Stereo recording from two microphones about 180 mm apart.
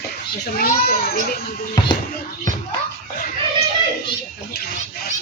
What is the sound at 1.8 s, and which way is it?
Speech, 20° left (ahead or behind).